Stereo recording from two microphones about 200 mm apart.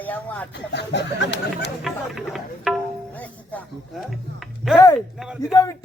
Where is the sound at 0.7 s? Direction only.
60° left (ahead or behind).